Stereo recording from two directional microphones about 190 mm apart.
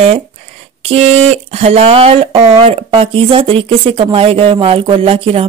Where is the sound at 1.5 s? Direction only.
35° right (ahead or behind).